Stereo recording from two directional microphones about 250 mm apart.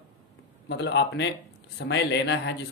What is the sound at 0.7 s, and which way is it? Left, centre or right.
Speech, left.